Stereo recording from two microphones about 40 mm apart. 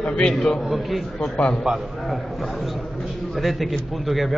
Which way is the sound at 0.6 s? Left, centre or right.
Centre.